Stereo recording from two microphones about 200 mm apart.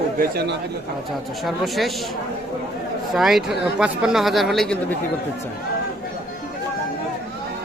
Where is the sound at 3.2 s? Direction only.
Centre (ahead or behind).